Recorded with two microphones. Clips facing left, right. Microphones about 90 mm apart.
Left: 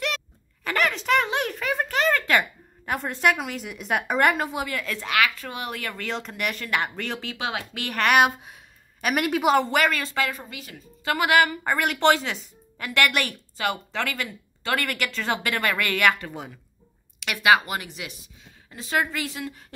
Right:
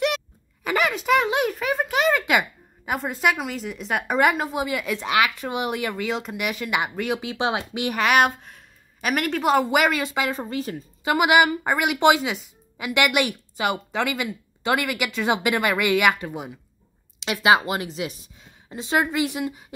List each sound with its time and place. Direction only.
0.7 s a sound: 10° right (ahead or behind)
4.6 s speech: 15° right (ahead or behind)
8.0 s speech: centre (ahead or behind)
9.7 s speech: 15° right (ahead or behind)
10.3 s a woman's voice: 35° right (ahead or behind)
11.1 s speech: 15° right (ahead or behind)